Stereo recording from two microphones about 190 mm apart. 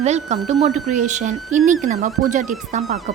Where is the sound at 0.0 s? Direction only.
35° right (ahead or behind).